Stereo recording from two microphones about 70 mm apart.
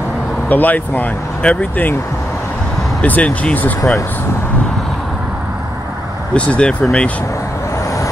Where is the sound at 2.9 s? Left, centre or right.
Left.